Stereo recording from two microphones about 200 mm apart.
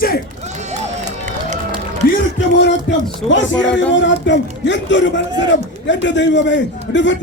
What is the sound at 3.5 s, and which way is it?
Speech, 5° left (ahead or behind).